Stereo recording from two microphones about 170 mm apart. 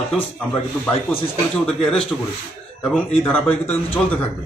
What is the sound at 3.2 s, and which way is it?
Speech, 10° left (ahead or behind).